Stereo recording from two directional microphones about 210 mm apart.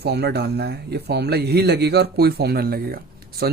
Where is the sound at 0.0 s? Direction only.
50° right (ahead or behind).